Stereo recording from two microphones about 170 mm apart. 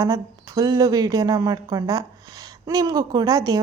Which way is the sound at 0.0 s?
20° right (ahead or behind).